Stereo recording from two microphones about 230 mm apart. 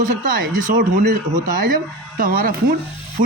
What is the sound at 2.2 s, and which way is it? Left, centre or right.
Speech, right.